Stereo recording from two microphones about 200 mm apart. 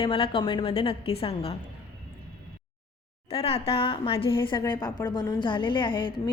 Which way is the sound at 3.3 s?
30° left (ahead or behind).